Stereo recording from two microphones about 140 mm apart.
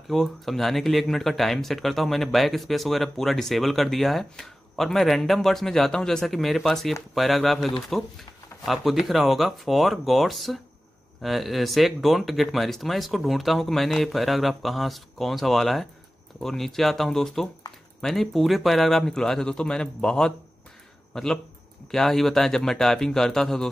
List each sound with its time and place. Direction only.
0.1 s speech: centre (ahead or behind)